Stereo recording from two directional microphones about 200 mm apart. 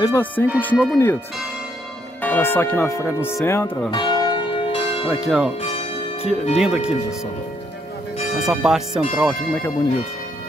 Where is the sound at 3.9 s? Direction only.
20° left (ahead or behind).